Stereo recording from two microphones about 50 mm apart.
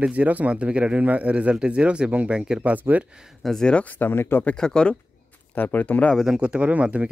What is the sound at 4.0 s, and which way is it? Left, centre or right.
Speech, left.